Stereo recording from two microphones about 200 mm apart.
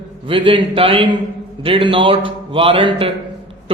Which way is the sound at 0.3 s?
25° right (ahead or behind).